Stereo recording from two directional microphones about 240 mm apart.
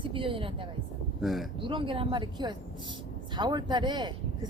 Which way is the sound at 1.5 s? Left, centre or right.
Right.